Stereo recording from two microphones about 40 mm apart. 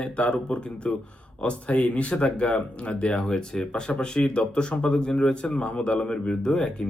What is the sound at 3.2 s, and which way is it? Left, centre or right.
A man's voice, centre.